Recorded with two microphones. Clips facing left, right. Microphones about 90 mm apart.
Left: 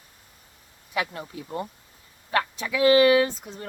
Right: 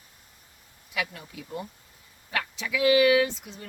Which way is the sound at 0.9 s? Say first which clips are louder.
Left 4 dB; 40° left (ahead or behind).